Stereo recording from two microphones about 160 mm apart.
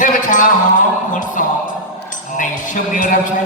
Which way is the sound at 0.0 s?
55° left (ahead or behind).